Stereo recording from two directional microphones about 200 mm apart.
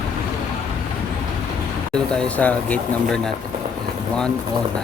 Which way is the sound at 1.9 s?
5° left (ahead or behind).